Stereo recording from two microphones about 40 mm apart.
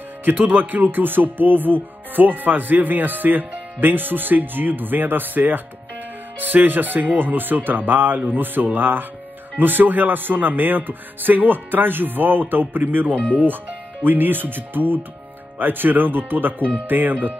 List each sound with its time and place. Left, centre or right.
0.3 s speech: right